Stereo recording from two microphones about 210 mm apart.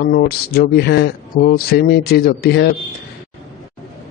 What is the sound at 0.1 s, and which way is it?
Speech, 50° left (ahead or behind).